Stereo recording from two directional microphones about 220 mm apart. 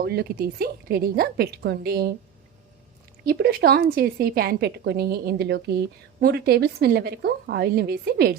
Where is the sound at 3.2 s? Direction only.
45° right (ahead or behind).